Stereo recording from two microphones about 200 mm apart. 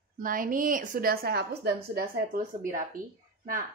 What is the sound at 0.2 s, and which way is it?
A woman's voice, 45° right (ahead or behind).